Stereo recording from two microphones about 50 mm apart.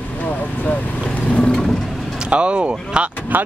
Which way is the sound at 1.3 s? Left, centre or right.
Left.